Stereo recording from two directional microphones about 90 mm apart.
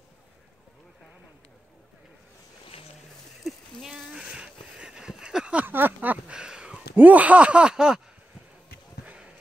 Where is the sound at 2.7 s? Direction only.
90° left.